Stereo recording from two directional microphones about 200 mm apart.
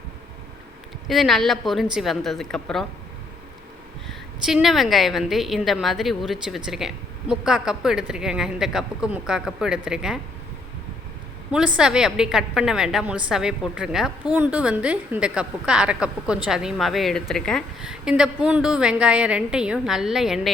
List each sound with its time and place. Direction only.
1.0 s a woman's voice: centre (ahead or behind)
4.4 s a woman's voice: centre (ahead or behind)
11.5 s a woman's voice: 5° right (ahead or behind)